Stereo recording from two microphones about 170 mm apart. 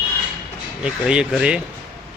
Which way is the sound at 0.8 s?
5° right (ahead or behind).